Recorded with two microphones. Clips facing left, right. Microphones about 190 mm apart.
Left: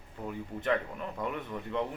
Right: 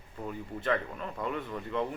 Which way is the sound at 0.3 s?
15° left (ahead or behind).